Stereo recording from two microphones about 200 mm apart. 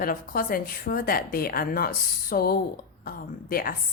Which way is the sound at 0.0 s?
45° left (ahead or behind).